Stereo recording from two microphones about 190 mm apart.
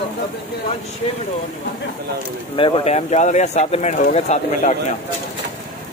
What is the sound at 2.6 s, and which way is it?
Speech, 30° left (ahead or behind).